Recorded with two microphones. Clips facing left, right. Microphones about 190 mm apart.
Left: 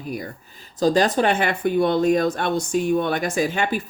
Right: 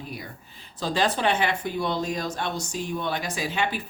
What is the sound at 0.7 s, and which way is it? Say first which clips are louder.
Speech: left 7 dB; 45° left (ahead or behind).